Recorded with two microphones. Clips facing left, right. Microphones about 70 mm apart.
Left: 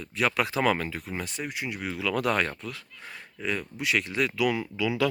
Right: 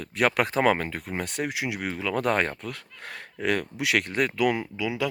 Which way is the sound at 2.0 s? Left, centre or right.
Right.